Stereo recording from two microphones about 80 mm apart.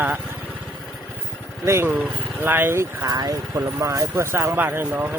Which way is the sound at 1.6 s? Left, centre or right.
Right.